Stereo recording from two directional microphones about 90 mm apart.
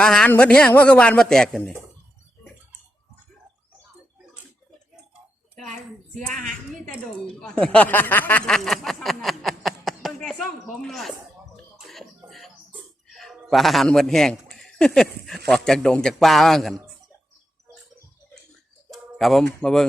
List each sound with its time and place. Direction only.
0.0 s speech: 5° left (ahead or behind)
6.8 s speech: 5° left (ahead or behind)
8.4 s a man's voice: 5° left (ahead or behind)
11.8 s music: centre (ahead or behind)
13.1 s a man's voice: centre (ahead or behind)
18.9 s bird: centre (ahead or behind)
19.6 s a man's voice: 5° left (ahead or behind)